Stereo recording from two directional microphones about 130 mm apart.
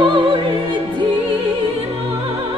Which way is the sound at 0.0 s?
40° right (ahead or behind).